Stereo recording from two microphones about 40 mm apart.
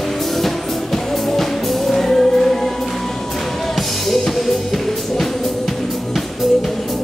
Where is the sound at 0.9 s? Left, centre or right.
Centre.